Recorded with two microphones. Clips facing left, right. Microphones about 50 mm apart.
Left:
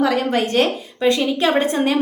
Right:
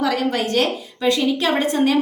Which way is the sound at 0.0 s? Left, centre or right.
Left.